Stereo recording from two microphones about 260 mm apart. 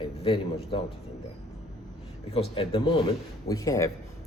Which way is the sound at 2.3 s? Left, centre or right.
Centre.